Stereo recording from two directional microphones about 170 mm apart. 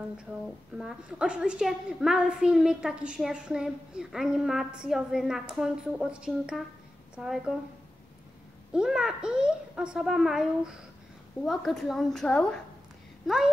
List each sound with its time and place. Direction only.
0.7 s a woman's voice: 5° right (ahead or behind)
8.7 s a woman's voice: 5° right (ahead or behind)